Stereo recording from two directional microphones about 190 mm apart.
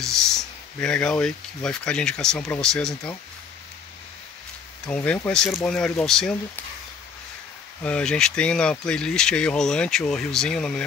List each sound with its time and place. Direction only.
0.0 s speech: centre (ahead or behind)
4.8 s speech: 5° left (ahead or behind)
7.8 s speech: 5° left (ahead or behind)